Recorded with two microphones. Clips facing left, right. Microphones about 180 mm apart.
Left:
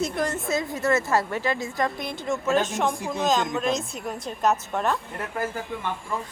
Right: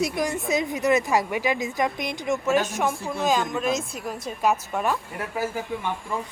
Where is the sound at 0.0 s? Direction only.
10° right (ahead or behind).